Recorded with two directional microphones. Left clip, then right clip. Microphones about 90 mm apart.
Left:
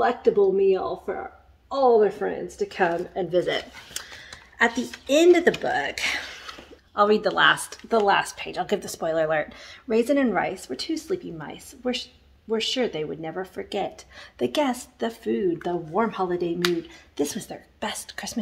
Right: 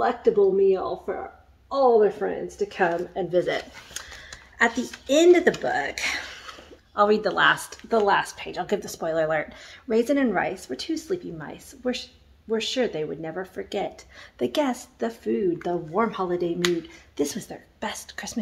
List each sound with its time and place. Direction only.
0.0 s a woman's voice: 55° left (ahead or behind)